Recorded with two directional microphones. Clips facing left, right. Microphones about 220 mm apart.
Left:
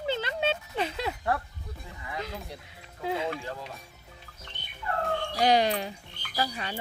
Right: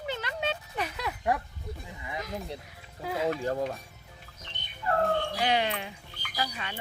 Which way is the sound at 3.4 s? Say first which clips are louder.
Right 9 dB; 50° right (ahead or behind).